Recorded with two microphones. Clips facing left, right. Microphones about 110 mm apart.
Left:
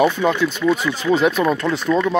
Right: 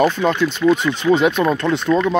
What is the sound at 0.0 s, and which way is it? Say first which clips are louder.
Speech: even; 5° left (ahead or behind).